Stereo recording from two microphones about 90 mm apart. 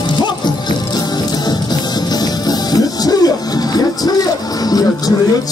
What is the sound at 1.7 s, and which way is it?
Music, 45° left (ahead or behind).